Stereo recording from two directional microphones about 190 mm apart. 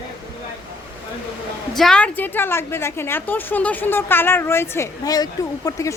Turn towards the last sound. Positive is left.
turn(degrees=15)  # may be behind; listen again after turning